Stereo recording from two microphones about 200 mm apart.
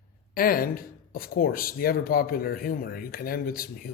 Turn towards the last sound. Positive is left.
turn(degrees=45)  # may be behind; listen again after turning